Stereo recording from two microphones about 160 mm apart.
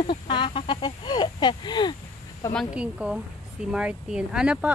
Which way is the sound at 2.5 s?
Centre (ahead or behind).